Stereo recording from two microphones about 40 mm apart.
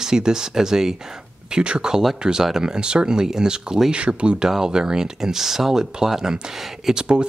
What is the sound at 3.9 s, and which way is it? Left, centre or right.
Speech, right.